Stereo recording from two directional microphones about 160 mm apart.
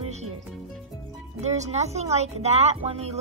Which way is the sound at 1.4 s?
45° right (ahead or behind).